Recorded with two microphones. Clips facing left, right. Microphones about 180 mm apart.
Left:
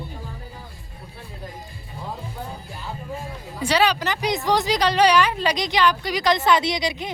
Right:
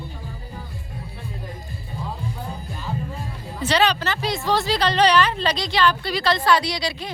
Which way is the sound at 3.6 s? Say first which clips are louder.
Even; 10° left (ahead or behind).